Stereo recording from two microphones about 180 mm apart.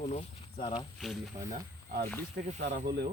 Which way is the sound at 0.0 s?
35° left (ahead or behind).